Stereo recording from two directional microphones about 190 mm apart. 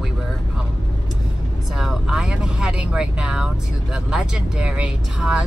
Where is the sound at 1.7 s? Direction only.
5° right (ahead or behind).